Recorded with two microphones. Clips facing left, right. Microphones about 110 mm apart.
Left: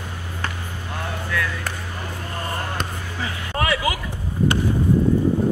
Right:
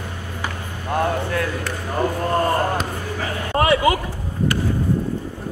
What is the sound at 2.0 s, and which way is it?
Basketball bounce, 45° right (ahead or behind).